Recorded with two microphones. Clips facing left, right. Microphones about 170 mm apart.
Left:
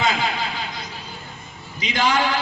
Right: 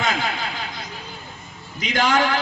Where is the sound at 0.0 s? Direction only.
50° right (ahead or behind).